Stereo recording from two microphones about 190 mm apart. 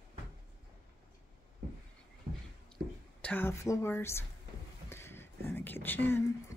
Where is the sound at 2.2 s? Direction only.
55° right (ahead or behind).